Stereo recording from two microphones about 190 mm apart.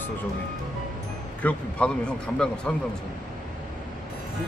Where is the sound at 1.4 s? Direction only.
5° left (ahead or behind).